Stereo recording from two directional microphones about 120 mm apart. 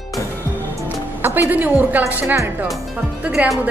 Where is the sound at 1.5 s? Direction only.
15° right (ahead or behind).